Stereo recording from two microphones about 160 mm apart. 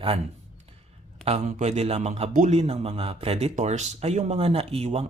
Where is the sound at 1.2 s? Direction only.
40° right (ahead or behind).